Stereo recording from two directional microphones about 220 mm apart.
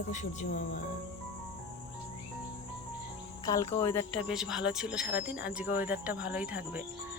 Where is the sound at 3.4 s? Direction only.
15° left (ahead or behind).